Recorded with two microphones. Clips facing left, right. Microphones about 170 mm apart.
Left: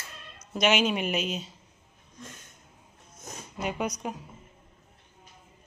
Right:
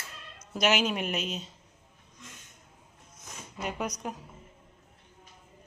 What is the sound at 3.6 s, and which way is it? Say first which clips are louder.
Speech: left 3 dB; centre (ahead or behind).